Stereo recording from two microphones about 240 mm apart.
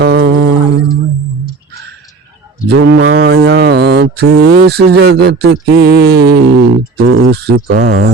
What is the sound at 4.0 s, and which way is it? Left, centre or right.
Speech, right.